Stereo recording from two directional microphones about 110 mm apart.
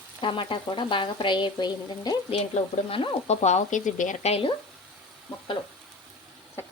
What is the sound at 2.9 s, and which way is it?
Stir, 55° left (ahead or behind).